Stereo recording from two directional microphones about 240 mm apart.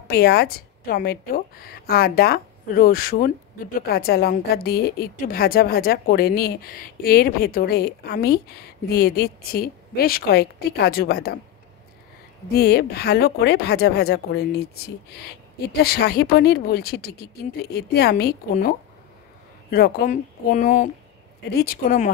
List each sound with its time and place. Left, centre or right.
0.1 s speech: left
12.5 s speech: left